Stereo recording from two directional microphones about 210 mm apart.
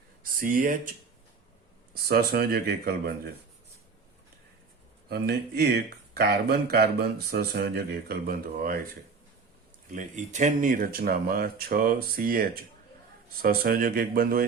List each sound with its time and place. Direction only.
0.2 s speech: 45° right (ahead or behind)
1.9 s speech: 50° right (ahead or behind)
5.0 s speech: 50° right (ahead or behind)
9.9 s speech: 35° right (ahead or behind)